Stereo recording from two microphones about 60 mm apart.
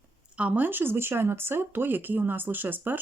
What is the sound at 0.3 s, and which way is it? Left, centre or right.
Speech, right.